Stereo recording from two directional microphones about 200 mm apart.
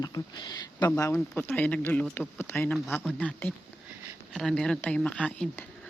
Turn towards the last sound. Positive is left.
turn(degrees=5)  # may be behind; listen again after turning